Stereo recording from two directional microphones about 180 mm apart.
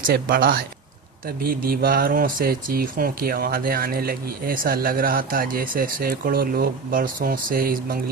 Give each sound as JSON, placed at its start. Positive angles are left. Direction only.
{"t": 0.0, "sound": "speech", "side_deg": -55}